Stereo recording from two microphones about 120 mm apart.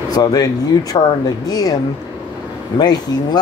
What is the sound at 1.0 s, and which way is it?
Speech, 45° left (ahead or behind).